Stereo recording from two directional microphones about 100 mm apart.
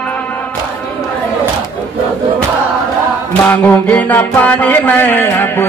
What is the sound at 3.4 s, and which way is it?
Music, 15° left (ahead or behind).